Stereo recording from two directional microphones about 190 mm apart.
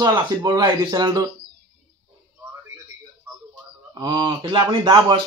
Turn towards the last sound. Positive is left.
turn(degrees=-20)  # may be behind; listen again after turning